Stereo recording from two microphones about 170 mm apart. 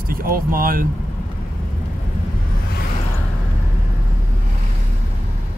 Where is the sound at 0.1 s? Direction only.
60° right (ahead or behind).